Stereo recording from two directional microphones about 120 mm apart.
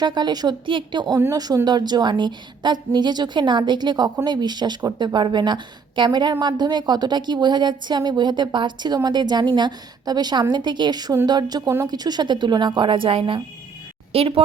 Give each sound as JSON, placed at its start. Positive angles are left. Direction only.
{"t": 0.0, "sound": "a woman's voice", "side_deg": -35}